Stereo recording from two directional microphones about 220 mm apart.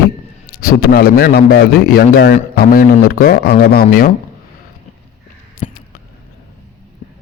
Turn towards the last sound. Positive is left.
turn(degrees=30)  # may be behind; listen again after turning